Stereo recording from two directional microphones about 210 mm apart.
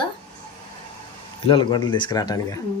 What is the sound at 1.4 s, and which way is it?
Speech, 25° left (ahead or behind).